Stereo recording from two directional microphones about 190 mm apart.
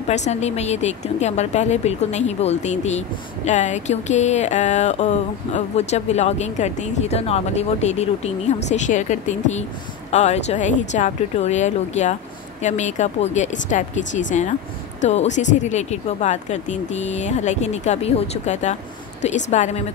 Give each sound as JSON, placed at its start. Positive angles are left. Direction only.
{"t": 0.1, "sound": "speech", "side_deg": 35}